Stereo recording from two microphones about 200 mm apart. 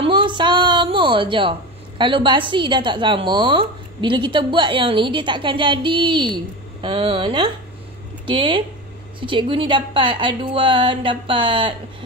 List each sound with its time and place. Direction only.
0.0 s a woman's voice: 25° right (ahead or behind)